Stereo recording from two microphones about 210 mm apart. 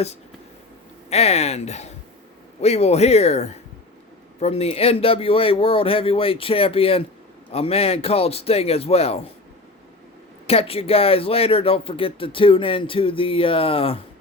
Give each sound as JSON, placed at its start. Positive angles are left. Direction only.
{"t": 1.1, "sound": "speech", "side_deg": 30}
{"t": 10.4, "sound": "speech", "side_deg": 30}